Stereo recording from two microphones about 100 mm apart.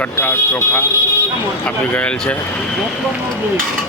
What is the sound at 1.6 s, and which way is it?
Speech, 10° left (ahead or behind).